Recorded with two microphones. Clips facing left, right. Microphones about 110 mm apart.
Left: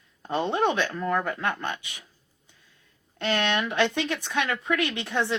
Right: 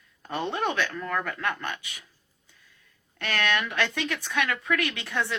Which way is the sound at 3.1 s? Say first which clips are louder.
Left 2 dB; 20° left (ahead or behind).